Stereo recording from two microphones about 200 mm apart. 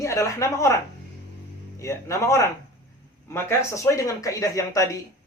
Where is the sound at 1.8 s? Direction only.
15° left (ahead or behind).